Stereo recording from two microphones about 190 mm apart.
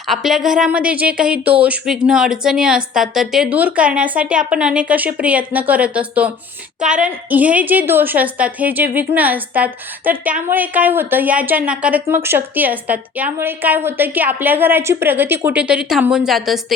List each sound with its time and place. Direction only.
0.1 s a woman's voice: centre (ahead or behind)